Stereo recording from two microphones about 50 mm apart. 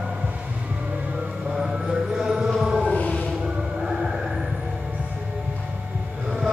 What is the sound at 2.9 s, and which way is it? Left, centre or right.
Music, left.